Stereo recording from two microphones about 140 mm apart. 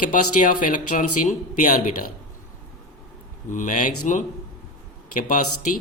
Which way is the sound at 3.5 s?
65° left (ahead or behind).